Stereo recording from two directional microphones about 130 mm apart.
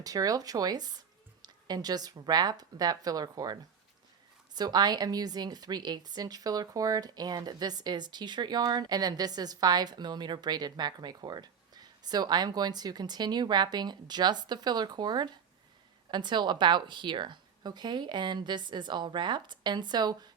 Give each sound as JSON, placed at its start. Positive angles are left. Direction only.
{"t": 0.0, "sound": "a woman's voice", "side_deg": -30}